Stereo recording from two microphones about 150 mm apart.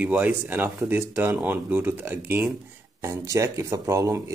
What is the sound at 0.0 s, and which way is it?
Speech, 10° right (ahead or behind).